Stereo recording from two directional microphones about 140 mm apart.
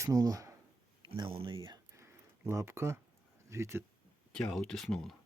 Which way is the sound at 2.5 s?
20° right (ahead or behind).